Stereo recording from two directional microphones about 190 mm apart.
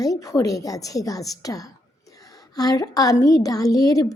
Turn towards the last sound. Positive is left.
turn(degrees=20)  # may be behind; listen again after turning